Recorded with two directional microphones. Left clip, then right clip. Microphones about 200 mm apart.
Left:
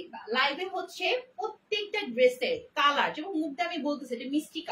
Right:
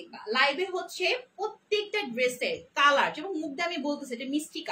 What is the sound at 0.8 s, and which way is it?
A woman's voice, 25° right (ahead or behind).